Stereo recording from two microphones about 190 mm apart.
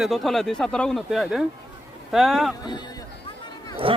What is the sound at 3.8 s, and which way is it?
Speech, 25° right (ahead or behind).